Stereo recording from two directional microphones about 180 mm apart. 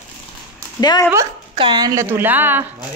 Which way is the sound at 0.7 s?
20° left (ahead or behind).